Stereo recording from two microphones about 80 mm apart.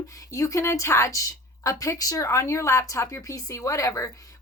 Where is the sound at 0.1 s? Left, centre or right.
Left.